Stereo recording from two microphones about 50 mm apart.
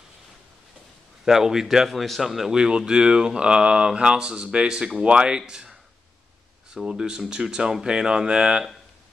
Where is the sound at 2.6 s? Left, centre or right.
Centre.